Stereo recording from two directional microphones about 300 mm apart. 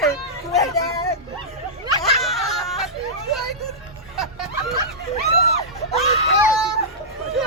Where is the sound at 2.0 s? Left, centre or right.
Centre.